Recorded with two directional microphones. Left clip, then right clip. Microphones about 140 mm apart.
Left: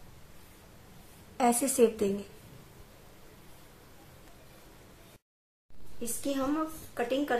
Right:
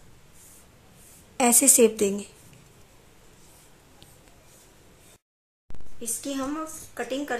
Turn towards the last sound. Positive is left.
turn(degrees=-5)  # may be behind; listen again after turning